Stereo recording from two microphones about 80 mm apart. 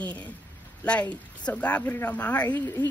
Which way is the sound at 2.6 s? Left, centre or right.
Left.